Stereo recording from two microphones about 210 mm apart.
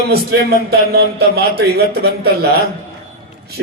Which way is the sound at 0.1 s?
50° right (ahead or behind).